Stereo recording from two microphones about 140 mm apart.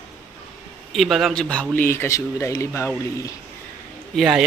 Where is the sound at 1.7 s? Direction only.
15° left (ahead or behind).